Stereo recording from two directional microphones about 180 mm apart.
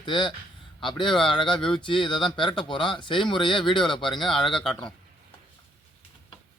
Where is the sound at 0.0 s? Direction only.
25° left (ahead or behind).